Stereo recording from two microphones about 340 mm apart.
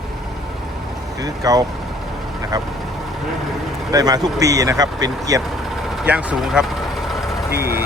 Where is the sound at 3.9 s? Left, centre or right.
Centre.